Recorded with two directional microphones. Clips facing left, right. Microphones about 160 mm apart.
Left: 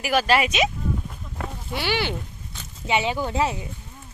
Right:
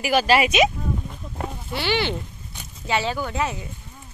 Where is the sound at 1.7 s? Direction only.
10° left (ahead or behind); by 3.6 s 25° left (ahead or behind).